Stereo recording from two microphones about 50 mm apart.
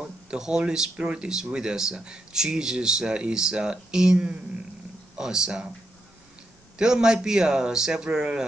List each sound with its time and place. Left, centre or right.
0.0 s speech: centre
6.8 s speech: centre